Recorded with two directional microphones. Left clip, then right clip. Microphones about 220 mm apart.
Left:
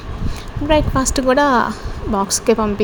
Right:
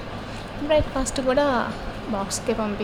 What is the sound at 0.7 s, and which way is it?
A woman's voice, 30° left (ahead or behind).